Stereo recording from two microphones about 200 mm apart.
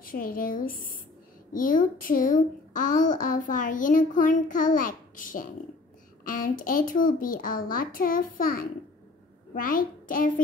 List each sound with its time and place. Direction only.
0.0 s a child's voice: 45° left (ahead or behind)